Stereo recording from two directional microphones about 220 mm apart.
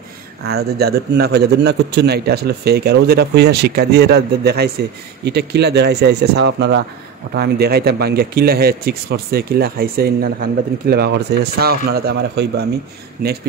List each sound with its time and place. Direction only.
0.5 s a man's voice: 45° right (ahead or behind)